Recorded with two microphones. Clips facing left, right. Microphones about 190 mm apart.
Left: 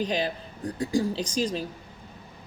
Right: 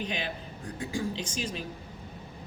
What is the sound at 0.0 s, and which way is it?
Speech, 35° left (ahead or behind).